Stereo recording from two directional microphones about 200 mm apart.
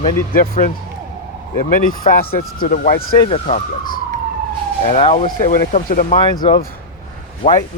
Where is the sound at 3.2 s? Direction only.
30° left (ahead or behind).